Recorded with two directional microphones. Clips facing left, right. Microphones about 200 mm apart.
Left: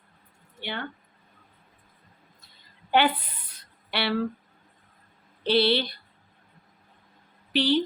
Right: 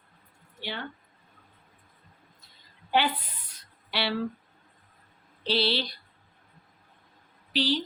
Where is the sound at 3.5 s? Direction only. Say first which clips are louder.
Left 4 dB; 60° left (ahead or behind).